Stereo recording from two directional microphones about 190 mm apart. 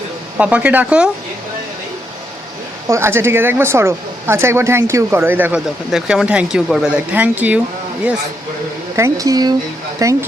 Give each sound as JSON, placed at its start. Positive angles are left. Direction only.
{"t": 0.3, "sound": "a woman's voice", "side_deg": -5}
{"t": 2.8, "sound": "a woman's voice", "side_deg": -15}
{"t": 9.0, "sound": "a woman's voice", "side_deg": -15}